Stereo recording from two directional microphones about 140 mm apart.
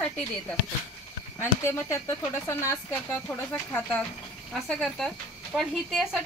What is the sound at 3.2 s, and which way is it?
Speech, 10° left (ahead or behind).